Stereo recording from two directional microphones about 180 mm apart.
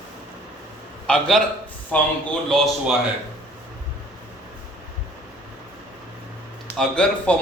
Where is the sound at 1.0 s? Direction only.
5° left (ahead or behind).